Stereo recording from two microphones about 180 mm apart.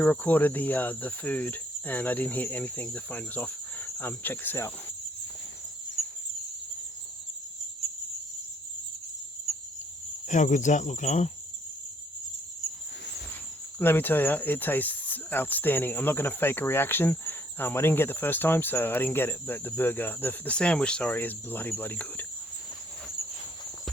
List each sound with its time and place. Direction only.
0.0 s speech: 10° left (ahead or behind)
10.2 s speech: 45° left (ahead or behind)
13.7 s speech: 10° left (ahead or behind)